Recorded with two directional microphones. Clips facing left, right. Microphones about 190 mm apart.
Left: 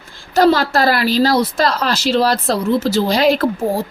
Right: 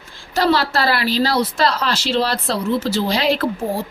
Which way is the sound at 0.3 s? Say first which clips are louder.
Left 5 dB; 45° left (ahead or behind).